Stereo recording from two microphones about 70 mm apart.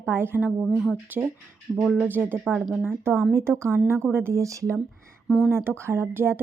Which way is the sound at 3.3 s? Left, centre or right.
Right.